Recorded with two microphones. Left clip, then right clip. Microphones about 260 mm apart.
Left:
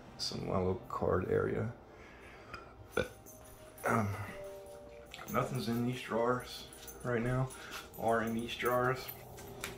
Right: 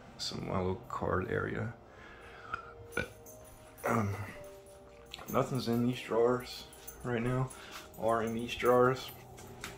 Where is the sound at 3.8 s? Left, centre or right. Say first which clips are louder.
Even; centre.